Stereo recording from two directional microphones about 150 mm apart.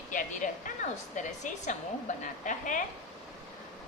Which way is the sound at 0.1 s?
60° left (ahead or behind).